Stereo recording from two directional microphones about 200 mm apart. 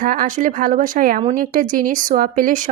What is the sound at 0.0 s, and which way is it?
A woman's voice, 45° right (ahead or behind).